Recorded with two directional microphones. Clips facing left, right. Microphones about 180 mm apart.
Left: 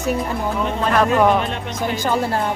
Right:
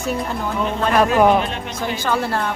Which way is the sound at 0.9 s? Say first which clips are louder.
Right 1 dB; 10° right (ahead or behind).